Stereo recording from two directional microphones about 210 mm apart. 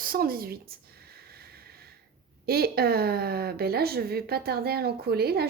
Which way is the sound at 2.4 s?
45° right (ahead or behind).